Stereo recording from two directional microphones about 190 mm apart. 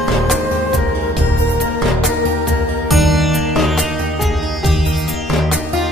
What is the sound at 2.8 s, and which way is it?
Music, centre (ahead or behind).